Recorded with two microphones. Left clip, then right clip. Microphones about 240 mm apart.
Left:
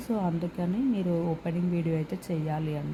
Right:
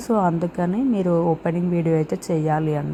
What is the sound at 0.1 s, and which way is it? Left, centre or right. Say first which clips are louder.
A woman's voice: right 11 dB; right.